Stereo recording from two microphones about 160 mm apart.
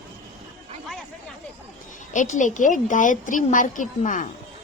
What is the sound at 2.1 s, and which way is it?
A woman's voice, 50° left (ahead or behind).